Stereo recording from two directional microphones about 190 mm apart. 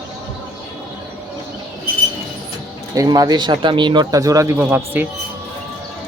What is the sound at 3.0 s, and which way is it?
Speech, 20° right (ahead or behind).